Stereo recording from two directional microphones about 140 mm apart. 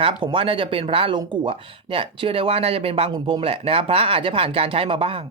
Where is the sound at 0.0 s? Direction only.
40° right (ahead or behind).